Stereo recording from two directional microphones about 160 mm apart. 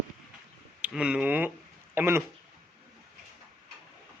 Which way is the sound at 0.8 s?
5° right (ahead or behind).